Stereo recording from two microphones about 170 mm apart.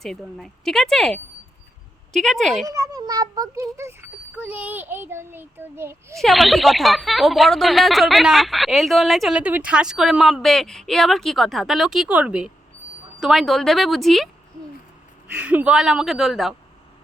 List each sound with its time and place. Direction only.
0.0 s speech: centre (ahead or behind)
2.6 s a child's voice: 20° right (ahead or behind)
6.1 s speech: centre (ahead or behind)
15.3 s speech: 5° right (ahead or behind)